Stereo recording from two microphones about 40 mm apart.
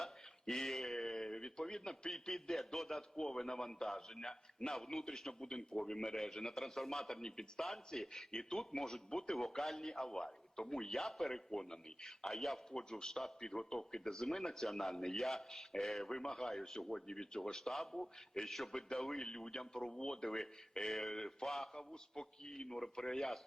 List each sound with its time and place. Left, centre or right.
0.0 s a sound: centre
2.3 s a man's voice: centre
7.3 s a man's voice: centre
12.7 s a man's voice: centre
17.7 s a man's voice: centre
21.8 s a man's voice: centre